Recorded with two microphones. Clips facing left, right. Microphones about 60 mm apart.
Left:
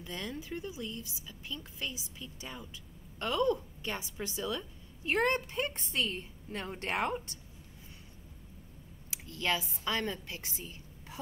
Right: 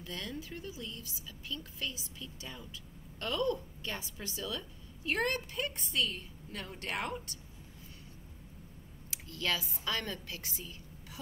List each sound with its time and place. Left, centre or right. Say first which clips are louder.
0.0 s a woman's voice: left 1 dB; centre
9.1 s a woman's voice: left 2 dB; left